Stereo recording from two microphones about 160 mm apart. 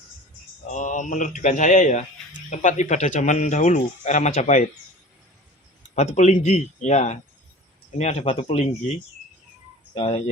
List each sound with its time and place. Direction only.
0.7 s speech: 50° left (ahead or behind)
5.9 s speech: 45° left (ahead or behind)
9.9 s speech: 40° left (ahead or behind)